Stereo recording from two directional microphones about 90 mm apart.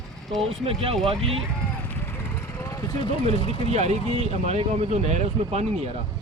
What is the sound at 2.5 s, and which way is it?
Vehicle, 35° left (ahead or behind).